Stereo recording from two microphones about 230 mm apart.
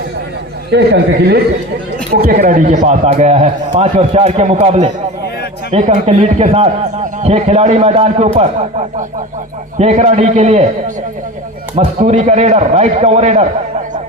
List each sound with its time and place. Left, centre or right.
0.7 s a man's voice: right
9.7 s a man's voice: right